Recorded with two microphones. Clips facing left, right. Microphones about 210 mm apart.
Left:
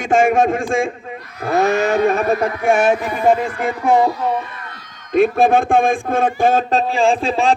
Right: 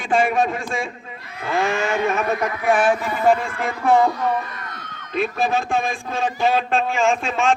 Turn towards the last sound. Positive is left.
turn(degrees=35)  # may be behind; listen again after turning